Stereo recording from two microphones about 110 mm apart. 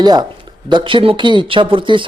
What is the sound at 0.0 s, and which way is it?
Speech, 40° right (ahead or behind).